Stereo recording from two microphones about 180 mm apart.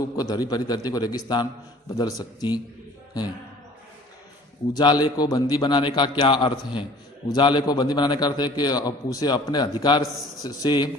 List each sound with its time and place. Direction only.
0.0 s a man's voice: 20° left (ahead or behind)
4.7 s a man's voice: 25° left (ahead or behind)